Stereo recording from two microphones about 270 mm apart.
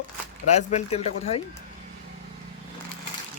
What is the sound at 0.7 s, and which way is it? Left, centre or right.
Speech, left.